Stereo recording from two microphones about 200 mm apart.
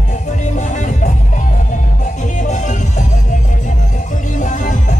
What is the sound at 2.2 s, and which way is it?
Music, 40° left (ahead or behind).